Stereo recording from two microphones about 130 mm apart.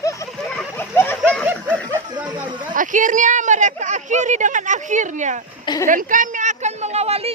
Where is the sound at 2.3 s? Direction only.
35° right (ahead or behind).